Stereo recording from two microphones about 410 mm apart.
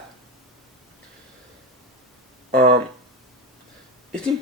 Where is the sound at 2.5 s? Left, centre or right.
Centre.